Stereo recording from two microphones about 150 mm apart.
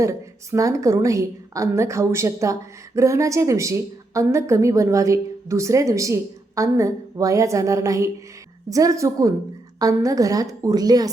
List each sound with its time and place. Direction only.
0.0 s a woman's voice: 20° right (ahead or behind)